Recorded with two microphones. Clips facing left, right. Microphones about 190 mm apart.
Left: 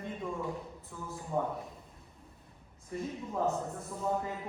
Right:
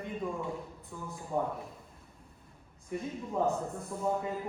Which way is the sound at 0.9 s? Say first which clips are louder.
Right 1 dB; centre (ahead or behind).